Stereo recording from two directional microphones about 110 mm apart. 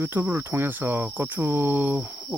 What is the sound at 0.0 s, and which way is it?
Speech, 20° right (ahead or behind).